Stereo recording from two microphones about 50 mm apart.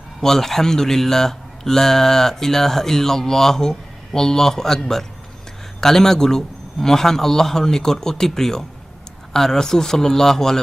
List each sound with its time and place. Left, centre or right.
0.2 s speech: centre